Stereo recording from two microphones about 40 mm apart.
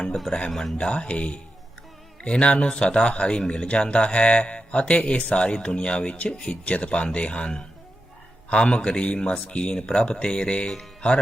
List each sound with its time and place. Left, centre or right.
0.3 s a man's voice: centre